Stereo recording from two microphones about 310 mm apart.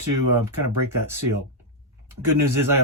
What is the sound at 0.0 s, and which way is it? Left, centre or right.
Speech, right.